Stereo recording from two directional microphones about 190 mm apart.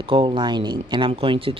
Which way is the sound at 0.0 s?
25° right (ahead or behind).